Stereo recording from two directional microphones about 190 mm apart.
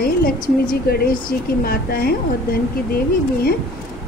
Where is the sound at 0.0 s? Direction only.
50° left (ahead or behind).